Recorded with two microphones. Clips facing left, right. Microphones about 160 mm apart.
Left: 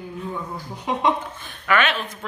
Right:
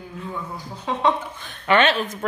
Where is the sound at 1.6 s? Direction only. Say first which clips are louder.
Right 3 dB; 30° right (ahead or behind).